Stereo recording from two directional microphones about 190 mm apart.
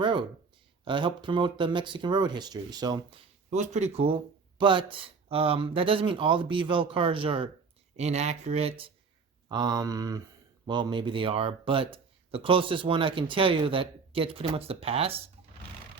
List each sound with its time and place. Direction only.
0.0 s a sound: 25° right (ahead or behind)
0.9 s speech: 25° right (ahead or behind)
3.5 s speech: 35° right (ahead or behind)
9.5 s speech: 20° right (ahead or behind)